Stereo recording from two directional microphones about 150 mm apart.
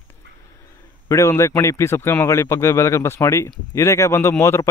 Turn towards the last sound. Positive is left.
turn(degrees=20)  # may be behind; listen again after turning